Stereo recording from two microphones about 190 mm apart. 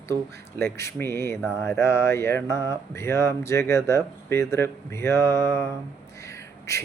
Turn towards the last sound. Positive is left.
turn(degrees=15)  # may be behind; listen again after turning